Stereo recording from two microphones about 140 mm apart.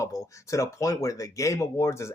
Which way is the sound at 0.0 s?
20° left (ahead or behind).